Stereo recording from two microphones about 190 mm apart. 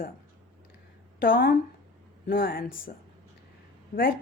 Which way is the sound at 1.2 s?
50° left (ahead or behind).